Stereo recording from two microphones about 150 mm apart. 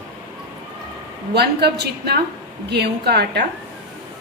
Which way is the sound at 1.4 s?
90° right.